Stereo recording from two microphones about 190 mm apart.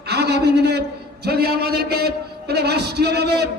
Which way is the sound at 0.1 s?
60° right (ahead or behind).